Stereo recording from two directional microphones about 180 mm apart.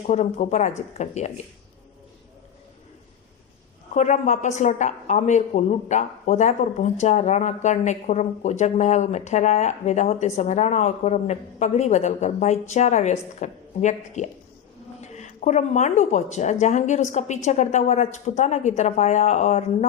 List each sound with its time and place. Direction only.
0.1 s a woman's voice: 40° left (ahead or behind)
3.9 s a woman's voice: 40° left (ahead or behind)